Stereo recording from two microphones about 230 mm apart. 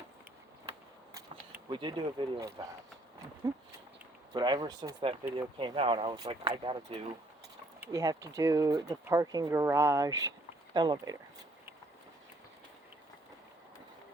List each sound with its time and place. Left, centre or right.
1.1 s speech: centre